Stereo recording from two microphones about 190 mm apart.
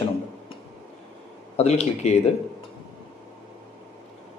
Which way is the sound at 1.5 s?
35° left (ahead or behind).